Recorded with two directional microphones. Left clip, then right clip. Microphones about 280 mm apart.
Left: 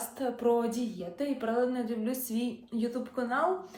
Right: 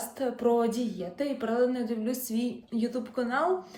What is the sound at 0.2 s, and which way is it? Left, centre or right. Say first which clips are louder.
A woman's voice: right 2 dB; centre.